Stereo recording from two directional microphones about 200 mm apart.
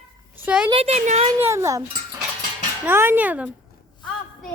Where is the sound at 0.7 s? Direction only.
30° right (ahead or behind).